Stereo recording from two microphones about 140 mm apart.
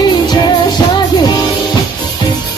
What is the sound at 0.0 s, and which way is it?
Music, 30° left (ahead or behind).